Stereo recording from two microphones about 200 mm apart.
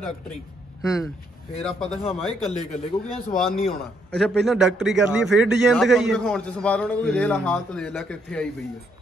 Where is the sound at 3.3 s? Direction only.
Centre (ahead or behind).